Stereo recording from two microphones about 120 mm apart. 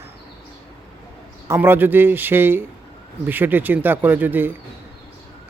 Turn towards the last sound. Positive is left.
turn(degrees=-15)  # may be behind; listen again after turning